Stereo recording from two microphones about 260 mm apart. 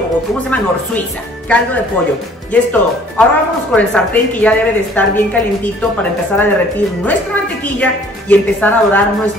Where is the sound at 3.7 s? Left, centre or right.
Centre.